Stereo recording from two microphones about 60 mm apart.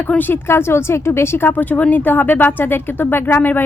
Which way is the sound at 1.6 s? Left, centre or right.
Left.